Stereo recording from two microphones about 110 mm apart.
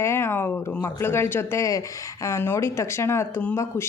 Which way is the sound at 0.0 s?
25° left (ahead or behind).